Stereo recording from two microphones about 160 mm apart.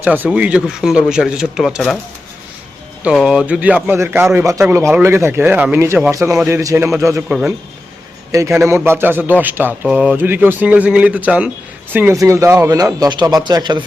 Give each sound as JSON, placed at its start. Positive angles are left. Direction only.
{"t": 0.0, "sound": "speech", "side_deg": -10}
{"t": 3.0, "sound": "speech", "side_deg": -5}
{"t": 7.3, "sound": "speech", "side_deg": -5}
{"t": 8.3, "sound": "speech", "side_deg": -20}